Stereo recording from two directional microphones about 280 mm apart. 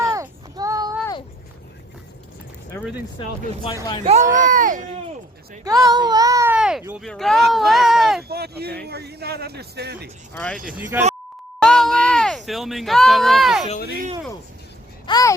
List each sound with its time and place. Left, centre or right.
0.0 s a sound: centre
2.7 s speech: centre
3.2 s speech: centre
4.0 s speech: right
5.6 s a child's voice: centre
8.3 s speech: right
10.3 s speech: centre
11.6 s a sound: centre
13.7 s speech: left
15.0 s a sound: centre